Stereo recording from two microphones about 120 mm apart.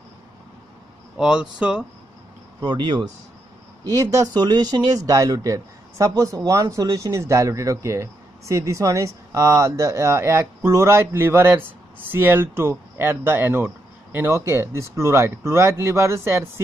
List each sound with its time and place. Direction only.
1.1 s speech: 5° right (ahead or behind)
2.6 s speech: 40° right (ahead or behind)
3.9 s speech: 30° right (ahead or behind)